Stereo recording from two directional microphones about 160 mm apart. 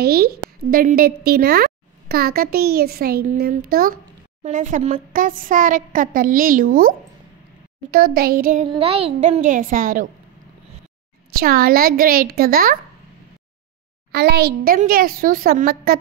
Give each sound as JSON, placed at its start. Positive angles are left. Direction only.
{"t": 0.0, "sound": "a woman's voice", "side_deg": -75}
{"t": 4.4, "sound": "speech", "side_deg": -50}
{"t": 8.6, "sound": "a woman's voice", "side_deg": -35}
{"t": 11.3, "sound": "a woman's voice", "side_deg": -70}
{"t": 14.1, "sound": "a woman's voice", "side_deg": -85}